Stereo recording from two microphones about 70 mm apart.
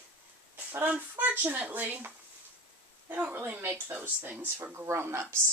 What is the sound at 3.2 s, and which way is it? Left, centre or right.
Speech, right.